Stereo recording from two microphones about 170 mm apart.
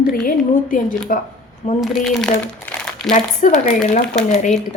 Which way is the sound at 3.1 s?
50° left (ahead or behind).